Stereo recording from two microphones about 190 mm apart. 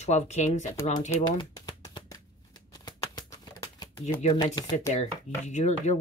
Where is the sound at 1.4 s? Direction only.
20° left (ahead or behind).